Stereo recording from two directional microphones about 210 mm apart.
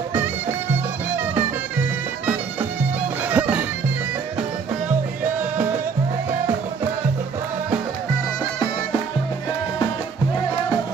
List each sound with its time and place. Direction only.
3.3 s music: 5° right (ahead or behind)